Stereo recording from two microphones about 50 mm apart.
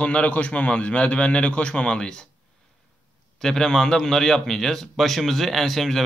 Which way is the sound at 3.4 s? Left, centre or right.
Centre.